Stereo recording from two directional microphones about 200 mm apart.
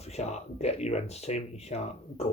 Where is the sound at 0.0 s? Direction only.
35° left (ahead or behind).